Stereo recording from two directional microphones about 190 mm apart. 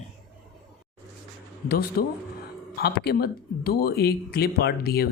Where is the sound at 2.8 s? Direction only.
55° left (ahead or behind).